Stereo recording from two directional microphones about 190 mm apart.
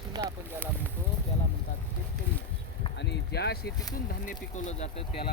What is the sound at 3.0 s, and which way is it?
Speech, 60° left (ahead or behind).